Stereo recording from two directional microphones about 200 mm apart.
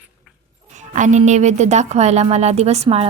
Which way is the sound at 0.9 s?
35° right (ahead or behind).